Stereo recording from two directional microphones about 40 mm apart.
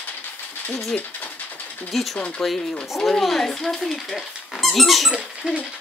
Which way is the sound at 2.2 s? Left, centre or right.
Left.